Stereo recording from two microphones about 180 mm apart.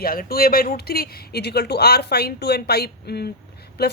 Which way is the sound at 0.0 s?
55° left (ahead or behind).